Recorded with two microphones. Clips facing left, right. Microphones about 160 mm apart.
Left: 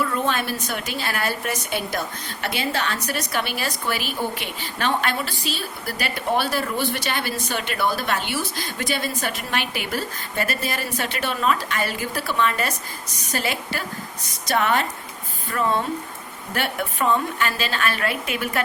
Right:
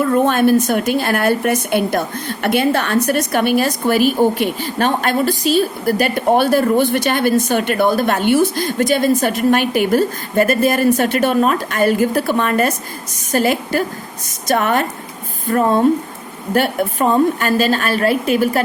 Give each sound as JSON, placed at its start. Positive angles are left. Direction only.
{"t": 0.0, "sound": "a woman's voice", "side_deg": -50}